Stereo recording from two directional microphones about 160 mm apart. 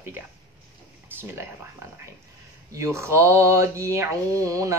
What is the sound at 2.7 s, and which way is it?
Speech, 20° right (ahead or behind).